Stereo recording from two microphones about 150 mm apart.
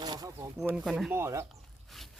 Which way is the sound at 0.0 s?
25° right (ahead or behind).